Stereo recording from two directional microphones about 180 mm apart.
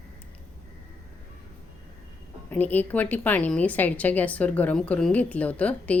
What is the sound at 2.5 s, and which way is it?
A woman's voice, 10° left (ahead or behind).